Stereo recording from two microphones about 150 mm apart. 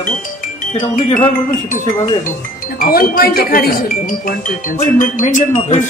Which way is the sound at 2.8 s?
80° left.